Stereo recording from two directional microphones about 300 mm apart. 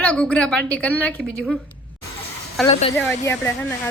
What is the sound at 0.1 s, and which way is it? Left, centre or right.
Speech, centre.